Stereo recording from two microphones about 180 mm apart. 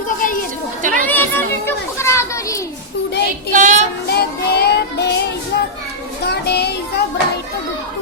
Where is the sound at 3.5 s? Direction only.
45° right (ahead or behind).